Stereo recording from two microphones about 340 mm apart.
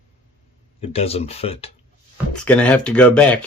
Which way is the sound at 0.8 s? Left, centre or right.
Centre.